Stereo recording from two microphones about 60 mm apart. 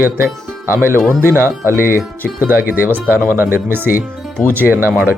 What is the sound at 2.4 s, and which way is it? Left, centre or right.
Speech, right.